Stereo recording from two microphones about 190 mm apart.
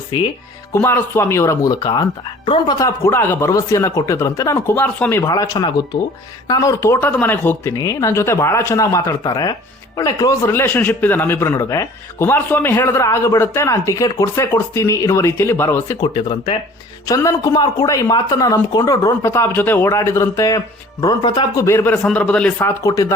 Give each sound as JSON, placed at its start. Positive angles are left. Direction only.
{"t": 0.1, "sound": "speech", "side_deg": 20}
{"t": 0.7, "sound": "a man's voice", "side_deg": 10}
{"t": 5.2, "sound": "a man's voice", "side_deg": 20}
{"t": 16.0, "sound": "a man's voice", "side_deg": 25}